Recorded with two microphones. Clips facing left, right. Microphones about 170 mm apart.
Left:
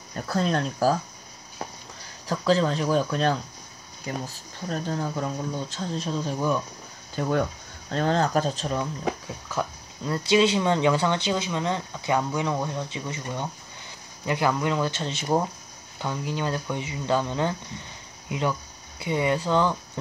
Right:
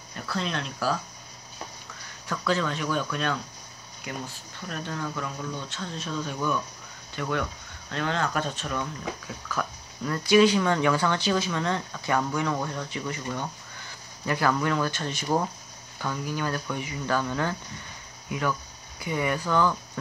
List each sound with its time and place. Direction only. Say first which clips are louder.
0.1 s speech: left 6 dB; 40° left (ahead or behind)
2.2 s speech: left 5 dB; 35° left (ahead or behind)
4.6 s speech: left 4 dB; 30° left (ahead or behind)
9.5 s speech: left 3 dB; 25° left (ahead or behind)